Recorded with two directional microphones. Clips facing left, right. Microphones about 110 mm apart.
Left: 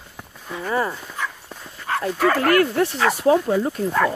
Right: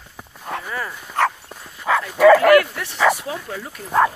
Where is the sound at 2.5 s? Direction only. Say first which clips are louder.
Even; 35° left (ahead or behind).